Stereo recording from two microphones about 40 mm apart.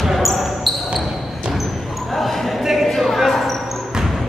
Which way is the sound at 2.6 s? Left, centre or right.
Centre.